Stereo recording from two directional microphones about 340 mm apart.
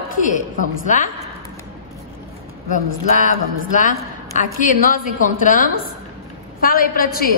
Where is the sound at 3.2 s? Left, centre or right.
Left.